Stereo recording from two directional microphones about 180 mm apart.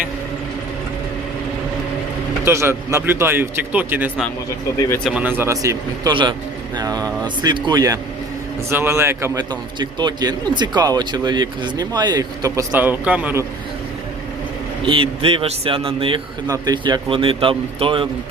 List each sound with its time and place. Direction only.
2.4 s a man's voice: 15° right (ahead or behind)
14.8 s a man's voice: 30° right (ahead or behind)